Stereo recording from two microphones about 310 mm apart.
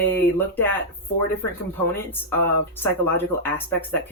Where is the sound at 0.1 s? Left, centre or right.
Centre.